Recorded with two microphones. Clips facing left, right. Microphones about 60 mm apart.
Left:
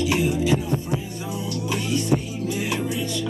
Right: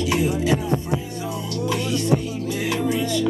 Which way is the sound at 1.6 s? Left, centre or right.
Right.